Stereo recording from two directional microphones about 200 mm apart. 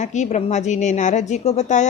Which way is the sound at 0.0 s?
35° left (ahead or behind).